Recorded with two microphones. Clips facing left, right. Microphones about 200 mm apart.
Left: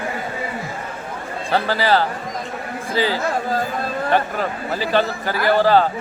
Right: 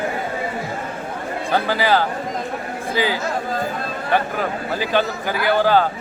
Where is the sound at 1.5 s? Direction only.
Centre (ahead or behind).